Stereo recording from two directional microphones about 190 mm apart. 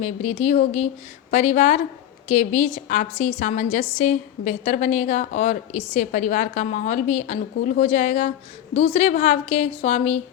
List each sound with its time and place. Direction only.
0.0 s a woman's voice: 35° left (ahead or behind)